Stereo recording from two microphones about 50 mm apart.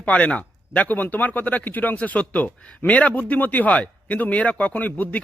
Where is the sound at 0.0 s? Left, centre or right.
Left.